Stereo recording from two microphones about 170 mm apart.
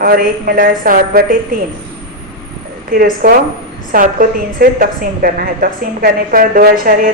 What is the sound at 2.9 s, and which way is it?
A woman's voice, 55° right (ahead or behind).